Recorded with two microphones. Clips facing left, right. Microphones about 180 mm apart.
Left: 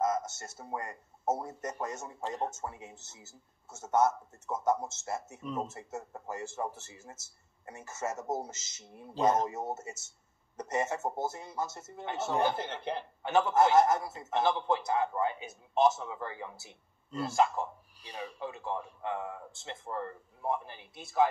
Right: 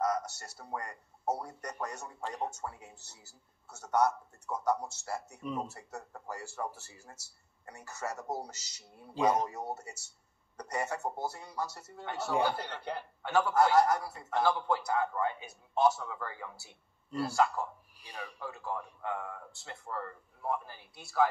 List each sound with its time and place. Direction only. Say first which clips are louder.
0.0 s a man's voice: left 1 dB; 20° left (ahead or behind)
5.4 s speech: right 1 dB; centre (ahead or behind)
5.7 s a man's voice: left 4 dB; 20° left (ahead or behind)
9.1 s speech: left 1 dB; centre (ahead or behind)
9.5 s a man's voice: left 3 dB; 20° left (ahead or behind)